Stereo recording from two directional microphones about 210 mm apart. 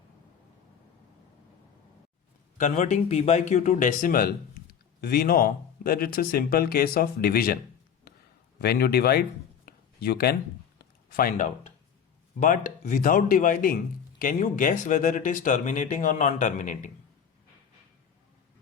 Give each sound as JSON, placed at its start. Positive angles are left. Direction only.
{"t": 2.6, "sound": "speech", "side_deg": 35}
{"t": 8.6, "sound": "speech", "side_deg": 50}
{"t": 9.6, "sound": "a sound", "side_deg": 45}
{"t": 11.2, "sound": "speech", "side_deg": 40}